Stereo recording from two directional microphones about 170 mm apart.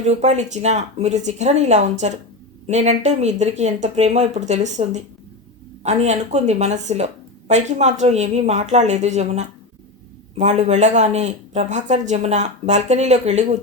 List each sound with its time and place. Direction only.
0.1 s a woman's voice: 40° right (ahead or behind)